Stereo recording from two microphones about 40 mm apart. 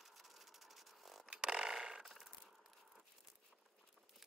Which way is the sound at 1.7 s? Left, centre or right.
Centre.